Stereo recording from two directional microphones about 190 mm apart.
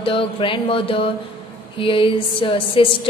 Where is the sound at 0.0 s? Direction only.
30° left (ahead or behind).